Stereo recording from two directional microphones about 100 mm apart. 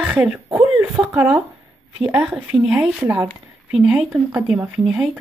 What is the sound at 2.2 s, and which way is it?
Speech, 5° right (ahead or behind).